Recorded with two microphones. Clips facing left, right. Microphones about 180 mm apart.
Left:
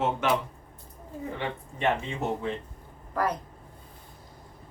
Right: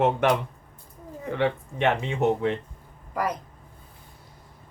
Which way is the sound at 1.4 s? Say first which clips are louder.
Right 9 dB; 70° right (ahead or behind).